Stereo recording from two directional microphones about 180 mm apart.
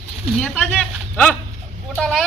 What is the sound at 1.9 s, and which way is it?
Speech, 5° left (ahead or behind).